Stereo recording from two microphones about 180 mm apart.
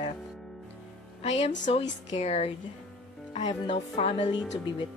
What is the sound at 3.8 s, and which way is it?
Speech, 35° left (ahead or behind).